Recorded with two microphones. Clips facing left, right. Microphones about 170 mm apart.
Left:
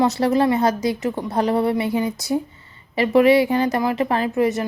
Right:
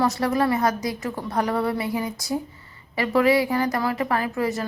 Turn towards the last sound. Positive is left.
turn(degrees=20)  # may be behind; listen again after turning